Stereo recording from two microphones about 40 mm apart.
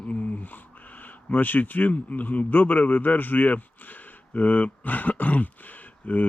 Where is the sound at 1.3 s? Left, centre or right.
Left.